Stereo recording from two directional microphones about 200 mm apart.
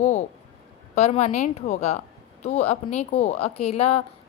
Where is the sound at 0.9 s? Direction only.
35° left (ahead or behind).